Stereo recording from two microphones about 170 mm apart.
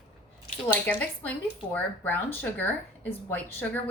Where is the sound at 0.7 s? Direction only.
10° left (ahead or behind).